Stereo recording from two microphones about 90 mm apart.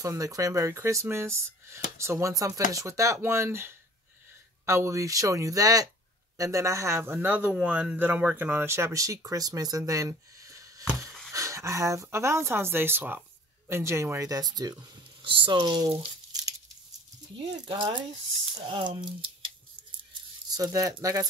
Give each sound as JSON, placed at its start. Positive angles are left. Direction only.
{"t": 0.0, "sound": "speech", "side_deg": -40}
{"t": 15.2, "sound": "speech", "side_deg": -70}
{"t": 16.3, "sound": "a sound", "side_deg": -45}
{"t": 17.6, "sound": "speech", "side_deg": -60}
{"t": 20.4, "sound": "speech", "side_deg": -45}